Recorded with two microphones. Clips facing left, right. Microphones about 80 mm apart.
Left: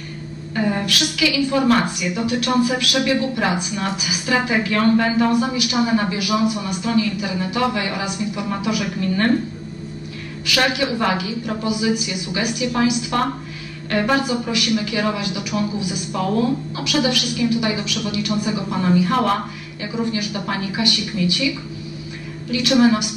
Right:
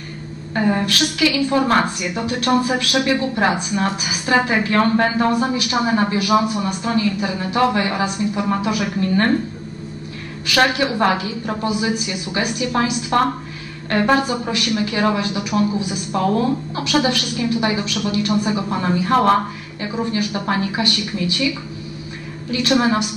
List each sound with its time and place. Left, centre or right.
0.7 s a woman's voice: right
10.4 s a woman's voice: right
22.5 s a woman's voice: right